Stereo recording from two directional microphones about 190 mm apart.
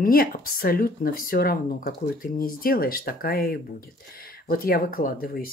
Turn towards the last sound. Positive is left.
turn(degrees=50)  # may be behind; listen again after turning